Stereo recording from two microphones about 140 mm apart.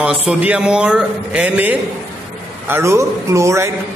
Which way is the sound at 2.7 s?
20° right (ahead or behind).